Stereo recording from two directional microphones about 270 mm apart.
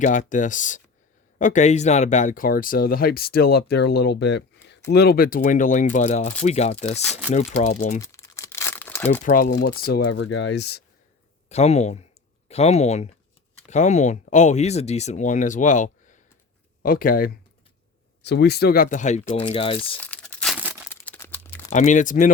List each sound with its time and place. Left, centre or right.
0.0 s speech: left
7.0 s speech: centre
7.6 s speech: left
8.0 s crumpling: centre
9.2 s speech: left
11.4 s speech: left
20.0 s crumpling: centre
20.9 s crumpling: centre
21.7 s speech: left